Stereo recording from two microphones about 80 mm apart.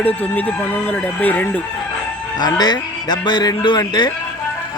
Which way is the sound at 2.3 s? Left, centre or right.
Left.